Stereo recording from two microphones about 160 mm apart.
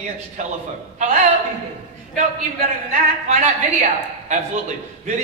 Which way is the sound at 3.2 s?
45° right (ahead or behind).